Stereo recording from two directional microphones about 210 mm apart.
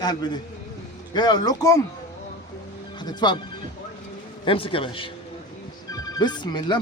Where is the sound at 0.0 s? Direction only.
20° left (ahead or behind).